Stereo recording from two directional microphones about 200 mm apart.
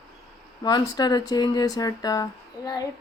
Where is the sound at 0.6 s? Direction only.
20° left (ahead or behind).